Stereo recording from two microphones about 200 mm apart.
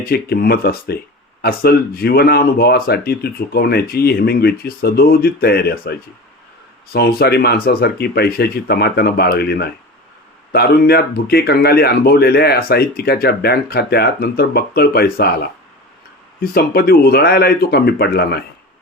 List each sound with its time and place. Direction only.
0.0 s speech: 50° left (ahead or behind)
16.4 s speech: 50° left (ahead or behind)